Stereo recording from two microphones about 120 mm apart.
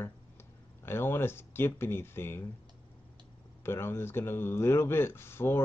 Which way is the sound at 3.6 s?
20° left (ahead or behind).